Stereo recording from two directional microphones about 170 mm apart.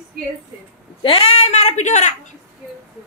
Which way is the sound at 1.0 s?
35° left (ahead or behind).